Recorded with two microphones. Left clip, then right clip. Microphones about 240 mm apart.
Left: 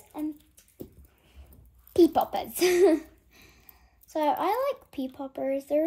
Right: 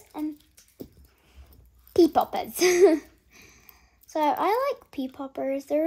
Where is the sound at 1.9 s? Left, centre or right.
Right.